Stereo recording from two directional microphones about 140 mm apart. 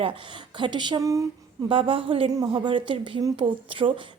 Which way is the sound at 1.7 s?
40° right (ahead or behind).